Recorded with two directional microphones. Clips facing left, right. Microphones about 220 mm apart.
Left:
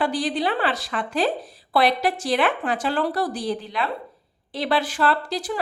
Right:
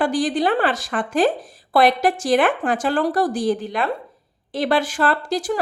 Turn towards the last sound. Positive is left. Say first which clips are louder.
# right 3 dB
turn(degrees=-45)  # may be behind; listen again after turning